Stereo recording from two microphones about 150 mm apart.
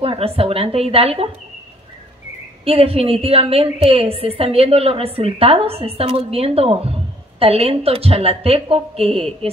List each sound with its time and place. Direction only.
0.0 s a woman's voice: 40° right (ahead or behind)
2.6 s a woman's voice: 40° right (ahead or behind)